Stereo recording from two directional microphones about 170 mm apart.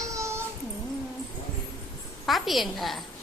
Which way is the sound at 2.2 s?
Centre (ahead or behind).